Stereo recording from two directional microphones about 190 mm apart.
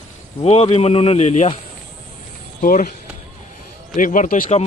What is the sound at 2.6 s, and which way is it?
Speech, 45° left (ahead or behind).